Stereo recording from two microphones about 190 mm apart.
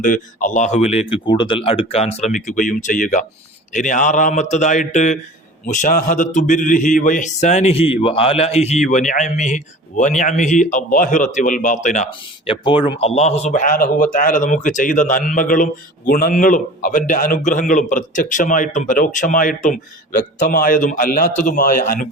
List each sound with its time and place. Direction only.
0.0 s speech: 45° left (ahead or behind)
12.5 s a man's voice: 30° left (ahead or behind); by 22.0 s 45° left (ahead or behind)